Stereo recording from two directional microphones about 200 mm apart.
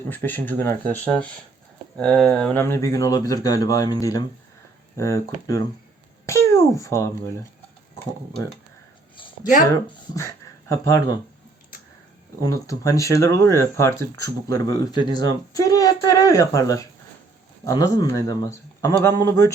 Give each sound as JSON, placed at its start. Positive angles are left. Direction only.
{"t": 0.1, "sound": "a child's voice", "side_deg": 10}
{"t": 9.1, "sound": "a sound", "side_deg": 25}
{"t": 12.4, "sound": "speech", "side_deg": 15}